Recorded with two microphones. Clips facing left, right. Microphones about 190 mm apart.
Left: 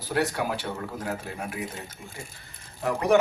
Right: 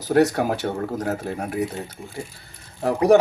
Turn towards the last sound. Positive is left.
turn(degrees=-35)  # may be behind; listen again after turning